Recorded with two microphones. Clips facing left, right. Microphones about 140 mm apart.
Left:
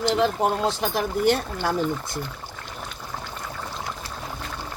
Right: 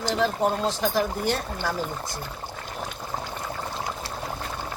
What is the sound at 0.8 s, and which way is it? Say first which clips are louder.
Speech: left 1 dB; 60° left (ahead or behind).